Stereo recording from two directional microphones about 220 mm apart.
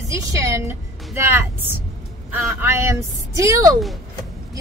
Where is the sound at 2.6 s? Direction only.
10° right (ahead or behind).